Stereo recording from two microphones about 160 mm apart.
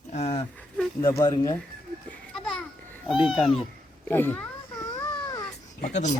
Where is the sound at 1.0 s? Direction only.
20° left (ahead or behind).